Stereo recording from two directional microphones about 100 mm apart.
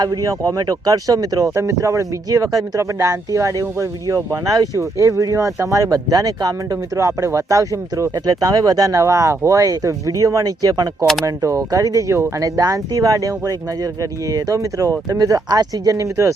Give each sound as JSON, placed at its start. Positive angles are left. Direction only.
{"t": 0.0, "sound": "speech", "side_deg": -40}